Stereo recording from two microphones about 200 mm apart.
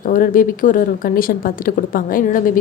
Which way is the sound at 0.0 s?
45° left (ahead or behind).